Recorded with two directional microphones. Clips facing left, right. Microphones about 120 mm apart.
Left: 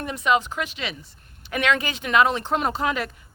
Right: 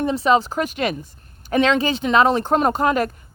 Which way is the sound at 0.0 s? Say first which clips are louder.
Right 5 dB; 30° right (ahead or behind).